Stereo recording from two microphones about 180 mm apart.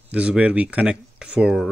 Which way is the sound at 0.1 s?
5° right (ahead or behind).